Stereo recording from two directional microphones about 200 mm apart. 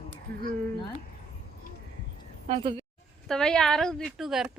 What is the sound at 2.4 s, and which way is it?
Speech, 30° right (ahead or behind).